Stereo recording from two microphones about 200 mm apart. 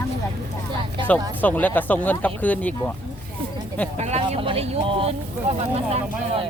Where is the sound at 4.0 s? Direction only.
30° right (ahead or behind).